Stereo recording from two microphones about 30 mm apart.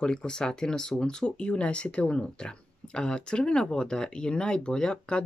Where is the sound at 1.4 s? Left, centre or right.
Left.